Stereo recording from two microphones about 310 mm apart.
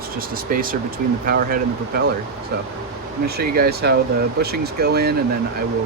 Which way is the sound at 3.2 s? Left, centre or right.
Right.